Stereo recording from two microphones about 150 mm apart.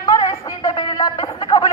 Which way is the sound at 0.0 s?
20° left (ahead or behind).